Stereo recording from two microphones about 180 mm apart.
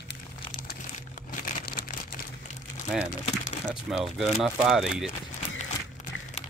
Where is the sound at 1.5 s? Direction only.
50° left (ahead or behind).